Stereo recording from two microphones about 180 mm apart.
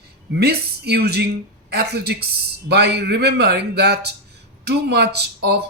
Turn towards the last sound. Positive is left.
turn(degrees=-65)  # may be behind; listen again after turning